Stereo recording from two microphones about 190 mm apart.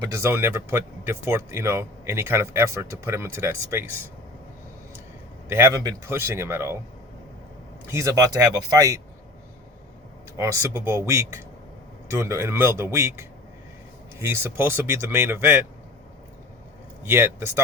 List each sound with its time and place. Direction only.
0.0 s speech: 15° right (ahead or behind)
5.5 s speech: 10° right (ahead or behind)
7.9 s speech: 15° right (ahead or behind)
10.3 s speech: 15° right (ahead or behind)
17.0 s speech: 10° right (ahead or behind)